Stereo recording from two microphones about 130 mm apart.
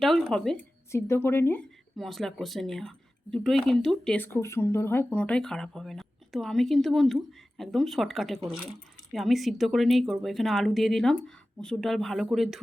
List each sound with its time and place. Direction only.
0.0 s speech: centre (ahead or behind)
0.5 s speech: 20° left (ahead or behind)
2.0 s speech: centre (ahead or behind)
4.2 s speech: 20° left (ahead or behind); by 12.5 s centre (ahead or behind)